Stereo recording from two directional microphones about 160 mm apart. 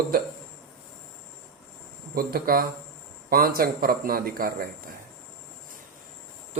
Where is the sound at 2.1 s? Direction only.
70° right (ahead or behind).